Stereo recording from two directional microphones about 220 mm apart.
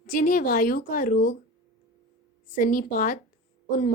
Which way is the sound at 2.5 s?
35° left (ahead or behind).